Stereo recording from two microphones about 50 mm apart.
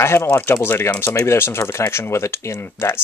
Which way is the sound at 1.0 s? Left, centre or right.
Left.